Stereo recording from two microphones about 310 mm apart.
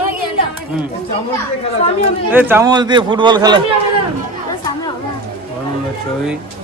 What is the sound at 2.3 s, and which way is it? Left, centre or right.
A man's voice, centre.